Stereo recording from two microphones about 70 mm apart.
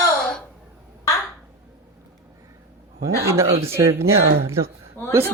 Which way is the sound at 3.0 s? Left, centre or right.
Right.